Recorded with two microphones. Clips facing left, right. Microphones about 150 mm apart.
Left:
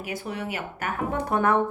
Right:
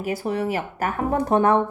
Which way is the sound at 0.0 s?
35° right (ahead or behind).